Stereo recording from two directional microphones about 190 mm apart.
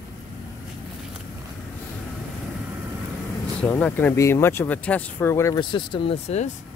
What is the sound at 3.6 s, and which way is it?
Speech, 10° left (ahead or behind).